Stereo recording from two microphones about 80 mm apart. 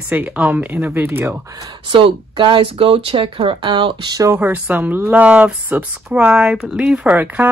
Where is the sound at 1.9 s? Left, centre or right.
Right.